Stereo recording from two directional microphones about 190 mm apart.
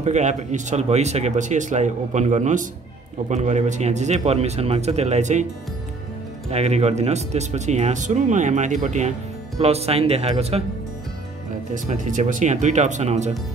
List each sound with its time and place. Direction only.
0.0 s speech: 40° right (ahead or behind)
6.5 s speech: 35° right (ahead or behind)
11.7 s speech: 40° right (ahead or behind)